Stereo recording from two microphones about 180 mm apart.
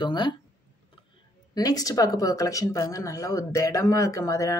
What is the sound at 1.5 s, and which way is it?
Speech, 20° left (ahead or behind).